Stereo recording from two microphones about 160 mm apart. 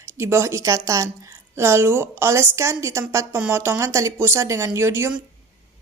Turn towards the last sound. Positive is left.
turn(degrees=-15)  # may be behind; listen again after turning